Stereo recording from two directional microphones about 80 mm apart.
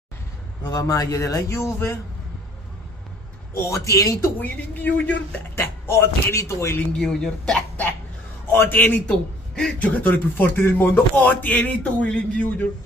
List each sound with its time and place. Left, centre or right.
0.7 s a man's voice: left
3.5 s speech: left
4.4 s a man's voice: left
5.6 s speech: left
6.9 s a man's voice: centre
8.5 s a man's voice: left
9.0 s a man's voice: centre